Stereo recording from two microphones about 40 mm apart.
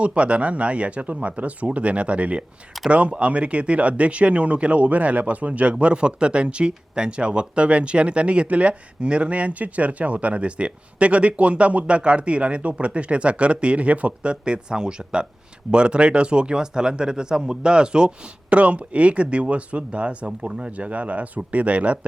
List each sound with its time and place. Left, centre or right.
0.0 s speech: right
18.5 s speech: right